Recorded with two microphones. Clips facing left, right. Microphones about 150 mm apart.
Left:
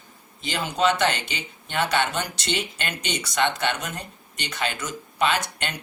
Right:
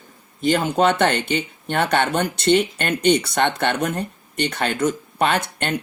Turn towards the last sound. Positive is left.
turn(degrees=-55)  # may be behind; listen again after turning